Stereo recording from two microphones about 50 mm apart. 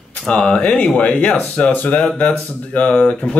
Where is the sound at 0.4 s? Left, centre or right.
Left.